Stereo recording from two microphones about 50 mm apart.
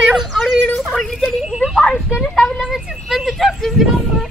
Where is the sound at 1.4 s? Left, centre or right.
Centre.